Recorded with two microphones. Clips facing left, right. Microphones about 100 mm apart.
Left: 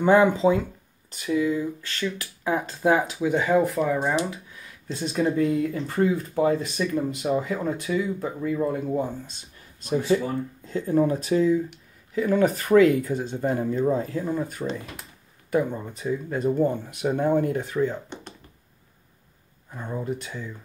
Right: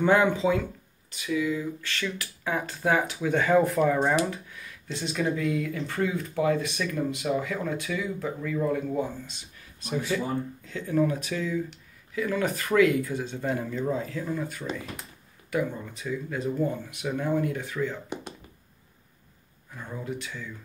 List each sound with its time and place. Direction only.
0.4 s speech: 30° left (ahead or behind); by 4.1 s 5° left (ahead or behind)
4.8 s speech: 40° left (ahead or behind)
8.5 s speech: 40° left (ahead or behind)
15.9 s speech: 40° left (ahead or behind)
19.7 s speech: 25° left (ahead or behind)
20.1 s speech: 35° left (ahead or behind)